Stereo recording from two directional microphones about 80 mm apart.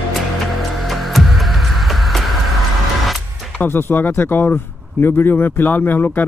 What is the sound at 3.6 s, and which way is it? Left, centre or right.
Speech, left.